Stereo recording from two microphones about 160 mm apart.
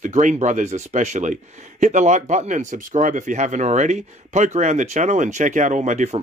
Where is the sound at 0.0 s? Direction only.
50° right (ahead or behind).